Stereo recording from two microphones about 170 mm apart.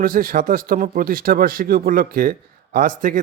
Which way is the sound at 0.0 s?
55° right (ahead or behind).